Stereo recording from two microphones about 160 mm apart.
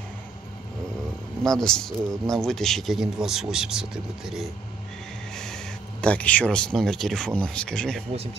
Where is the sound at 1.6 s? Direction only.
5° left (ahead or behind).